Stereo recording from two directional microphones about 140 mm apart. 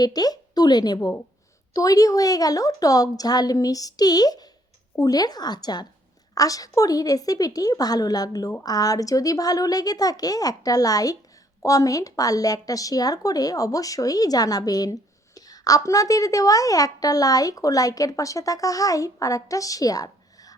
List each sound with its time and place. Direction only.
0.0 s speech: 30° left (ahead or behind)
0.9 s a woman's voice: 20° left (ahead or behind)